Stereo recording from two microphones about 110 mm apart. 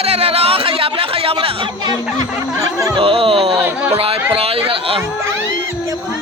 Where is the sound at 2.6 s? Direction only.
30° right (ahead or behind).